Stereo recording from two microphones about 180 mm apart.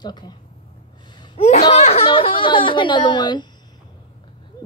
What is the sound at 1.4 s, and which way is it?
A woman's voice, 35° left (ahead or behind).